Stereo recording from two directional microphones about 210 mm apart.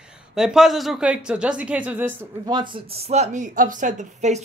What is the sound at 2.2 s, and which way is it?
Speech, 20° right (ahead or behind).